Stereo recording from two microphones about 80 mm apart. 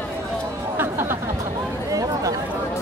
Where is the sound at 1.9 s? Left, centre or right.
Right.